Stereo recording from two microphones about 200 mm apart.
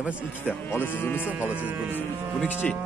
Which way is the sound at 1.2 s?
10° right (ahead or behind).